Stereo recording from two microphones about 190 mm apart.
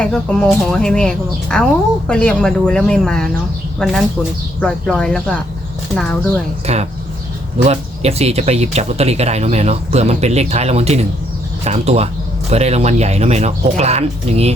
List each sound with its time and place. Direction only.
0.0 s speech: 5° left (ahead or behind)
6.7 s speech: 35° right (ahead or behind)